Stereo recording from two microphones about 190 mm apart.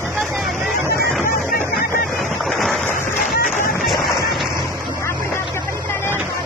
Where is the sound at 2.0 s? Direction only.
Centre (ahead or behind).